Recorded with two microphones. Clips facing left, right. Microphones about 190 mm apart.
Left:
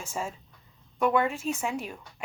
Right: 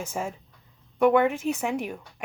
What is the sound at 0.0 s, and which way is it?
Speech, 60° right (ahead or behind).